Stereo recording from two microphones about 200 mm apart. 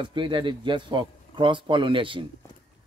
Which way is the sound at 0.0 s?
25° right (ahead or behind).